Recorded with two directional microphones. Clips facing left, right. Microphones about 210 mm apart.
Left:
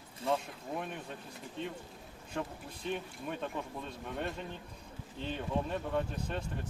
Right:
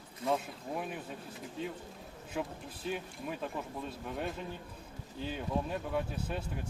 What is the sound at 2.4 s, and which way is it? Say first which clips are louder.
Speech: right 1 dB; 5° right (ahead or behind).